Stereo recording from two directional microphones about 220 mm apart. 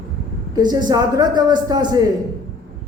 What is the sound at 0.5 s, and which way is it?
A man's voice, 15° right (ahead or behind).